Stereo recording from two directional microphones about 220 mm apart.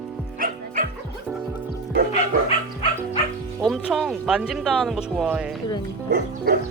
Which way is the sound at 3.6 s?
Centre (ahead or behind).